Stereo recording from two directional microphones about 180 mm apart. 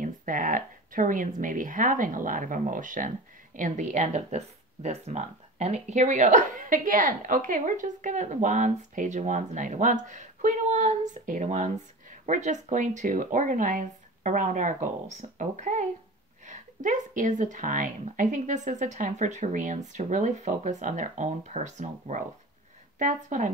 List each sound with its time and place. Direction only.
0.0 s speech: 50° right (ahead or behind)